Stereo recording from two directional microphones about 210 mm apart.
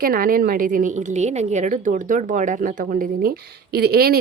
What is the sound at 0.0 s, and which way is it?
A woman's voice, 45° right (ahead or behind).